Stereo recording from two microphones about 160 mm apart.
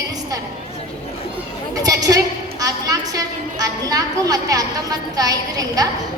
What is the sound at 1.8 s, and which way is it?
A woman's voice, 25° right (ahead or behind).